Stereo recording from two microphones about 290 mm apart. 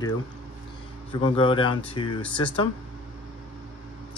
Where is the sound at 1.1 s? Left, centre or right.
Centre.